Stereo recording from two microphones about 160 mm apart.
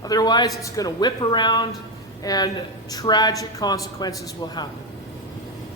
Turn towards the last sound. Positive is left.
turn(degrees=25)  # may be behind; listen again after turning